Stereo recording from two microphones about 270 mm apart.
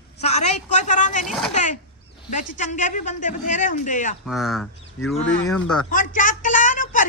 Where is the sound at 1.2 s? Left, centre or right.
Centre.